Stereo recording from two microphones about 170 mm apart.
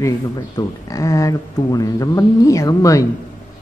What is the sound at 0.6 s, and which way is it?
Speech, 20° left (ahead or behind).